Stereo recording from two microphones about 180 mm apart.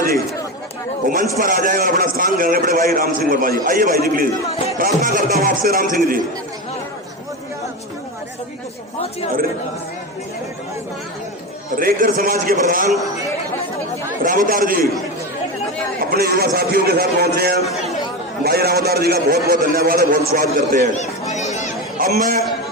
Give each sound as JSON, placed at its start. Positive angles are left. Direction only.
{"t": 1.0, "sound": "a man's voice", "side_deg": -50}
{"t": 4.4, "sound": "speech", "side_deg": 35}
{"t": 5.0, "sound": "a man's voice", "side_deg": -55}
{"t": 11.8, "sound": "a man's voice", "side_deg": -50}
{"t": 14.3, "sound": "a man's voice", "side_deg": -50}
{"t": 16.0, "sound": "a man's voice", "side_deg": -55}
{"t": 20.9, "sound": "chatter", "side_deg": 40}
{"t": 21.9, "sound": "chatter", "side_deg": -55}